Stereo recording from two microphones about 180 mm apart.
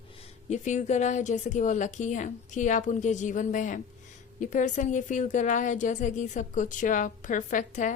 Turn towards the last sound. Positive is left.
turn(degrees=45)  # may be behind; listen again after turning